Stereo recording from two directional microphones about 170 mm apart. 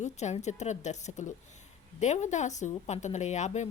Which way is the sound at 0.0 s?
40° left (ahead or behind).